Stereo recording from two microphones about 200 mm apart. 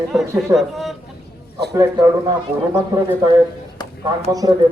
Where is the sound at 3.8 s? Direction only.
20° left (ahead or behind).